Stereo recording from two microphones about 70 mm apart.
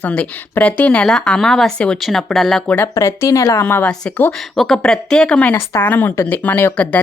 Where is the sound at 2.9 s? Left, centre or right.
Left.